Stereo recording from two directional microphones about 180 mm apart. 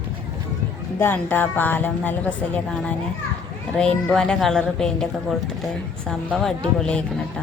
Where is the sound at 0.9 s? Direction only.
10° left (ahead or behind).